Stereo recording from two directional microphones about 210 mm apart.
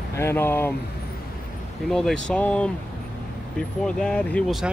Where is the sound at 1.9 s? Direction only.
Centre (ahead or behind).